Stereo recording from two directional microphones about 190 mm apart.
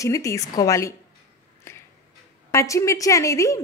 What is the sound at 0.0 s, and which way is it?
Speech, 15° left (ahead or behind).